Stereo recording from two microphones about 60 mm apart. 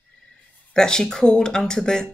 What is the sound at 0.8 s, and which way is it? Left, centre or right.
Speech, centre.